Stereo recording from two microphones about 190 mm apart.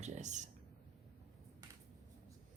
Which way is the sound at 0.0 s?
40° right (ahead or behind).